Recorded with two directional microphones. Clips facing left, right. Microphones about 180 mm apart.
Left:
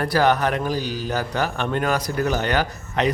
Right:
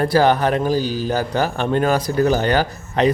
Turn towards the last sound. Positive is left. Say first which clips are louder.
# right 5 dB
turn(degrees=-35)  # may be behind; listen again after turning